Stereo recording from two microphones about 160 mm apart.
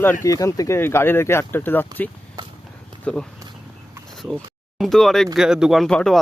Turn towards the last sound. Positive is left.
turn(degrees=5)  # may be behind; listen again after turning